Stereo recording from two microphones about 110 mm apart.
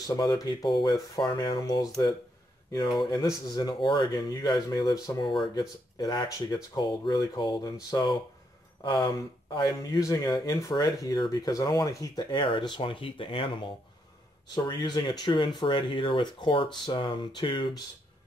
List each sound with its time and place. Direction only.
0.0 s speech: 40° left (ahead or behind)
3.0 s speech: 40° left (ahead or behind)
8.8 s speech: 45° left (ahead or behind)
9.9 s speech: 30° left (ahead or behind); by 17.8 s 45° left (ahead or behind)